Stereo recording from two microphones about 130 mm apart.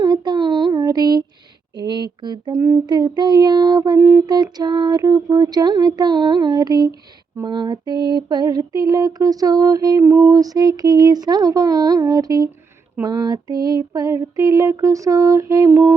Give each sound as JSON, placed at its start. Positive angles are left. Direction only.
{"t": 0.0, "sound": "child singing", "side_deg": -35}
{"t": 1.7, "sound": "a sound", "side_deg": -35}
{"t": 7.4, "sound": "female singing", "side_deg": -35}